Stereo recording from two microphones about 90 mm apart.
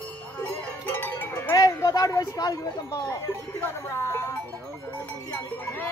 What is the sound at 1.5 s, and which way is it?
Speech, 40° left (ahead or behind).